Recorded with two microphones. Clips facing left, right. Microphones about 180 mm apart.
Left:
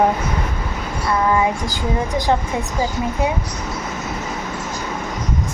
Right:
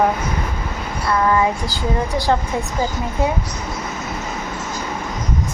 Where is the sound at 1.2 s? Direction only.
20° left (ahead or behind).